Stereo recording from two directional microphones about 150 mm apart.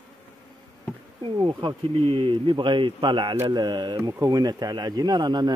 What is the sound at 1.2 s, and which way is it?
Speech, 35° right (ahead or behind).